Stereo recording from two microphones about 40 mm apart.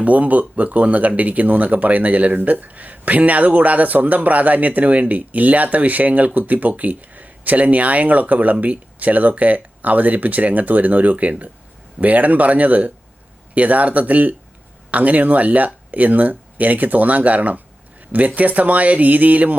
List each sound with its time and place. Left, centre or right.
0.0 s speech: right